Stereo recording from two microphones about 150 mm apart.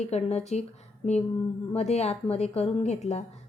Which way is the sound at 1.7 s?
45° left (ahead or behind).